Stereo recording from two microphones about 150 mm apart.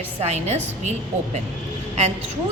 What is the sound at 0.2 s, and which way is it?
A woman's voice, 50° right (ahead or behind).